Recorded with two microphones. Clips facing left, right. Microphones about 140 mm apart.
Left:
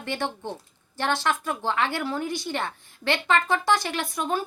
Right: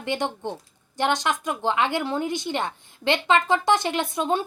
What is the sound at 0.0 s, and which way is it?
A woman's voice, 15° right (ahead or behind).